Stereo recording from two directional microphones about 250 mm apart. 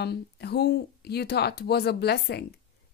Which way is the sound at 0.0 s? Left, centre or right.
Left.